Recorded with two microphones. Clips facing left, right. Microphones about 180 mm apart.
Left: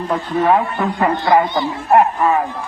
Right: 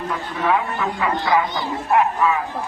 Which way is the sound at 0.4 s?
45° left (ahead or behind).